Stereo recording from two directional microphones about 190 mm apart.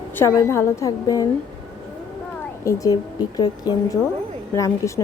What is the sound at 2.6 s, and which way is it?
Speech, 20° left (ahead or behind).